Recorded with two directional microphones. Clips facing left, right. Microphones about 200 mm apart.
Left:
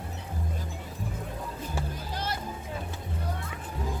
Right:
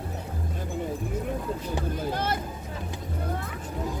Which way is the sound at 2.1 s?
55° right (ahead or behind).